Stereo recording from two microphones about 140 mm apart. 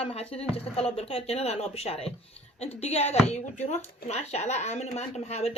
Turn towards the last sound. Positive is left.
turn(degrees=50)  # may be behind; listen again after turning